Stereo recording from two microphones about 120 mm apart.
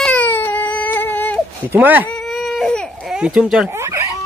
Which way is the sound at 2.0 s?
5° left (ahead or behind).